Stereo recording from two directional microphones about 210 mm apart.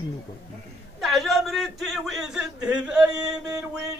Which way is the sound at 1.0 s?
Centre (ahead or behind).